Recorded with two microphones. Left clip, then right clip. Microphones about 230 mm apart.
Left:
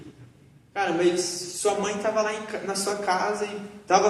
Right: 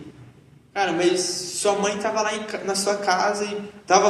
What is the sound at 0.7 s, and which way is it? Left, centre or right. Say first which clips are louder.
A man's voice: right 2 dB; right.